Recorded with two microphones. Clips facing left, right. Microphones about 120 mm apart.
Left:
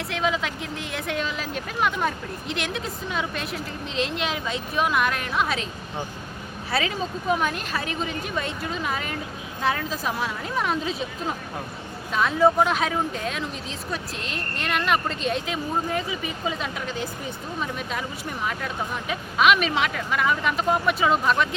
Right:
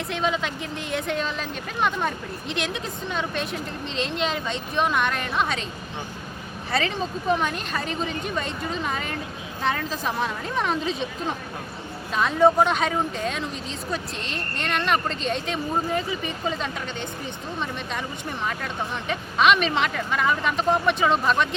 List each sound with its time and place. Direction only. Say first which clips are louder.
0.1 s speech: even; centre (ahead or behind)
6.7 s speech: right 1 dB; 5° left (ahead or behind)
18.4 s speech: left 1 dB; 5° left (ahead or behind)